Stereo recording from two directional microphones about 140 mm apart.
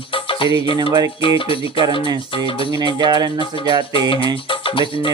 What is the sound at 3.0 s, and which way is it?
Speech, 30° right (ahead or behind).